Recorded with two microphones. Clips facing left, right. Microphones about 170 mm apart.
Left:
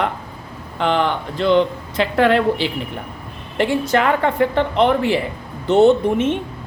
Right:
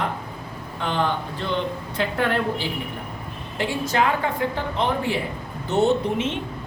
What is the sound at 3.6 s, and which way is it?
A woman's voice, 65° left (ahead or behind).